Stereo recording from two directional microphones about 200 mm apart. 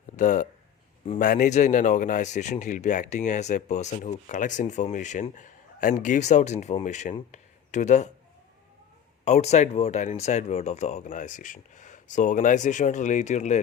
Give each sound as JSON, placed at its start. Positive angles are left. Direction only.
{"t": 0.2, "sound": "speech", "side_deg": 40}
{"t": 9.2, "sound": "speech", "side_deg": 35}